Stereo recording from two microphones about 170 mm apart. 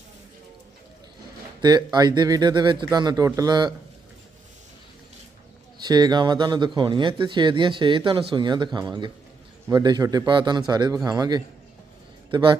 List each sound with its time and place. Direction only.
1.6 s speech: 25° right (ahead or behind)
5.8 s speech: 25° right (ahead or behind)